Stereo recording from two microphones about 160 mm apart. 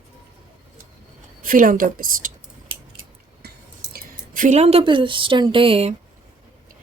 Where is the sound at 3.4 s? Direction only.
65° right (ahead or behind); by 5.9 s 35° right (ahead or behind).